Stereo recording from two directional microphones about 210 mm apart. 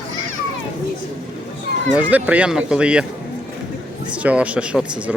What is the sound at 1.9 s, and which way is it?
Speech, 5° right (ahead or behind).